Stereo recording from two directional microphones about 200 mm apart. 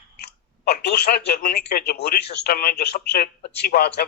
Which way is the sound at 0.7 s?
55° left (ahead or behind).